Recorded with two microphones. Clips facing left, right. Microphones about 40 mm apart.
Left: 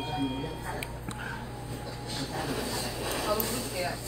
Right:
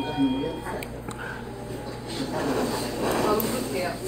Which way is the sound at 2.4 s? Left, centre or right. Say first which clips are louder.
Right 8 dB; centre.